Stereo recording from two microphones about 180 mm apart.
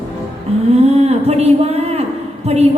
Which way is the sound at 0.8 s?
35° right (ahead or behind).